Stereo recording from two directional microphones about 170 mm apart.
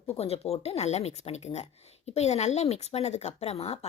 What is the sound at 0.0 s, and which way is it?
Speech, 35° left (ahead or behind).